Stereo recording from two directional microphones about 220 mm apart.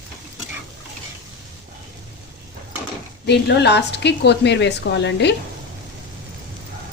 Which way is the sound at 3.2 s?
50° left (ahead or behind).